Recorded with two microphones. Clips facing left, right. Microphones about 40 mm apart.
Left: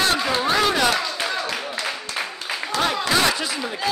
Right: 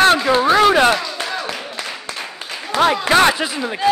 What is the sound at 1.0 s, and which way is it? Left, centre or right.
Music, centre.